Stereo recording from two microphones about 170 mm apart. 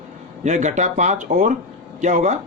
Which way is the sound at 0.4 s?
45° right (ahead or behind).